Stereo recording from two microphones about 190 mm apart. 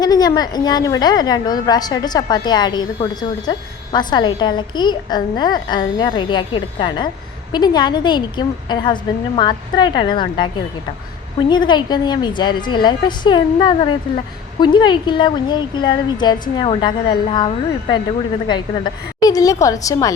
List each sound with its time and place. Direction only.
0.0 s a woman's voice: 20° left (ahead or behind)